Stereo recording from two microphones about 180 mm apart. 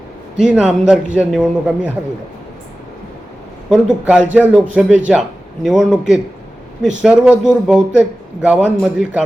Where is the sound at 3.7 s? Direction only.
5° right (ahead or behind).